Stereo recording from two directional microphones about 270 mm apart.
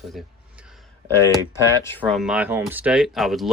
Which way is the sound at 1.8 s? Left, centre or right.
Centre.